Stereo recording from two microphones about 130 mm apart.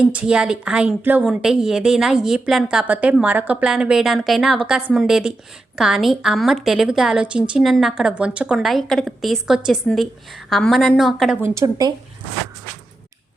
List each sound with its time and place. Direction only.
0.0 s a woman's voice: 10° right (ahead or behind)
11.4 s a woman's voice: 20° right (ahead or behind)